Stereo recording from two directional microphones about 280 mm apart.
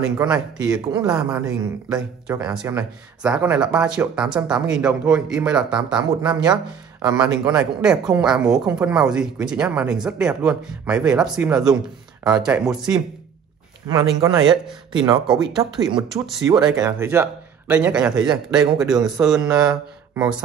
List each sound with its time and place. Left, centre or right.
0.0 s speech: centre
14.4 s speech: centre
14.9 s speech: centre
15.2 s speech: centre